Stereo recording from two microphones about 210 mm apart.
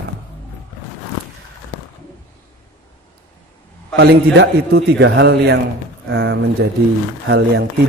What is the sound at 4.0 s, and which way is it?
A man's voice, 50° right (ahead or behind).